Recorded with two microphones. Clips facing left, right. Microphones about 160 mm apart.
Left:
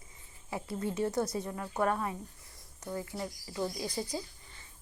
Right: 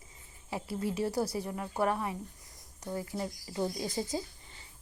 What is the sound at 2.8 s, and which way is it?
Speech, 15° right (ahead or behind).